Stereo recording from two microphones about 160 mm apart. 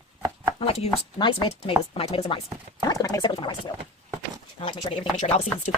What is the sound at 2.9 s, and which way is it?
Speech, 20° left (ahead or behind).